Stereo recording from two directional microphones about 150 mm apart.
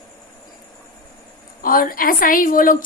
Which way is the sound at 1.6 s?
70° left (ahead or behind).